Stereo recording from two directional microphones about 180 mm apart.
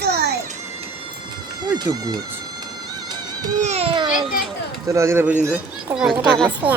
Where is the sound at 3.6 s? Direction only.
35° right (ahead or behind).